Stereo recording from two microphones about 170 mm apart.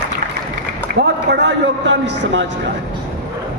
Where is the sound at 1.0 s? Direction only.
85° right.